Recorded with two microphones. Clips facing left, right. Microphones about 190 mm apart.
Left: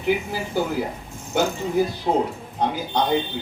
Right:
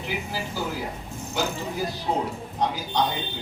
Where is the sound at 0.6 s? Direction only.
55° left (ahead or behind).